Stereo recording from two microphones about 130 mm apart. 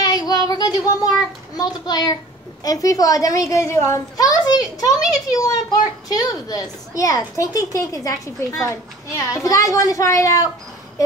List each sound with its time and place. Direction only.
0.0 s child singing: 30° left (ahead or behind)
1.6 s a child's voice: 30° left (ahead or behind)